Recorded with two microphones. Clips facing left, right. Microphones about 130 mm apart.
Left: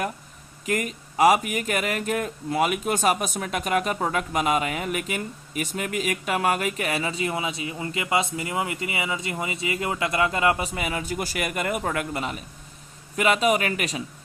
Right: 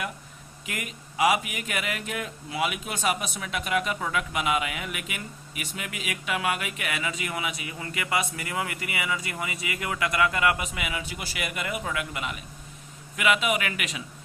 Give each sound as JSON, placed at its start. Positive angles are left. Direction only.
{"t": 0.6, "sound": "speech", "side_deg": 40}